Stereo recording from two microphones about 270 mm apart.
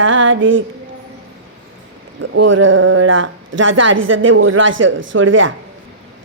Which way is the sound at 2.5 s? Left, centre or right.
Right.